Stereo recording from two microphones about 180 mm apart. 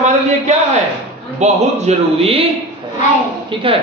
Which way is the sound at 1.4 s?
35° right (ahead or behind).